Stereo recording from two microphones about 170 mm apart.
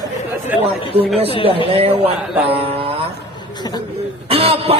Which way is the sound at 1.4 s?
35° right (ahead or behind).